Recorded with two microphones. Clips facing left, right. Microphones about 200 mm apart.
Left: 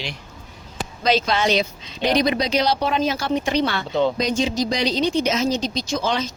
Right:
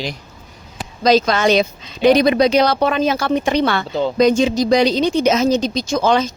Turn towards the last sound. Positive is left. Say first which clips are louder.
# right 7 dB
turn(degrees=-45)  # may be behind; listen again after turning